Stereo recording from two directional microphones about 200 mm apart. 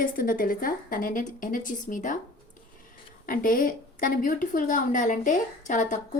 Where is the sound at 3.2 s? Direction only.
45° left (ahead or behind).